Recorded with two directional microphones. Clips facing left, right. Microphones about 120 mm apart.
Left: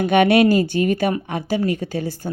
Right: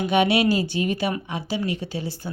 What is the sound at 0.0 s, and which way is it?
A woman's voice, 55° left (ahead or behind).